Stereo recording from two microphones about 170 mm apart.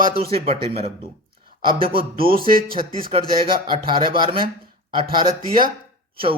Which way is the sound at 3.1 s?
30° right (ahead or behind).